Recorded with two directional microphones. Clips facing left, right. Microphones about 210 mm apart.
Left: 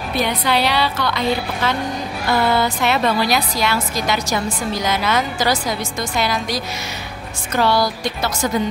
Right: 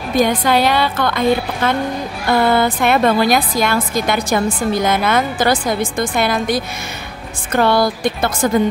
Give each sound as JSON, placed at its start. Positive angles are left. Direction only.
{"t": 0.1, "sound": "a woman's voice", "side_deg": -50}